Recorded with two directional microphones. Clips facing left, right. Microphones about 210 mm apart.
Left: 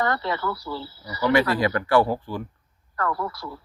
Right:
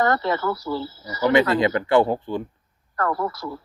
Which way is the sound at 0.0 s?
45° right (ahead or behind).